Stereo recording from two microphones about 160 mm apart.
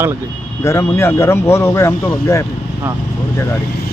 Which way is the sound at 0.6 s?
15° left (ahead or behind).